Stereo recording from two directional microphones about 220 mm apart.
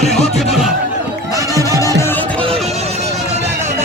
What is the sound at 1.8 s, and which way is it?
Music, 15° left (ahead or behind).